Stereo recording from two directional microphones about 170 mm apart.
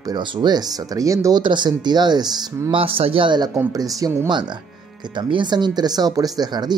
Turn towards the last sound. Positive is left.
turn(degrees=-25)  # may be behind; listen again after turning